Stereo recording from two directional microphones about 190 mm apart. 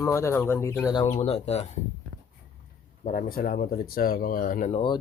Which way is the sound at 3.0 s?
50° left (ahead or behind).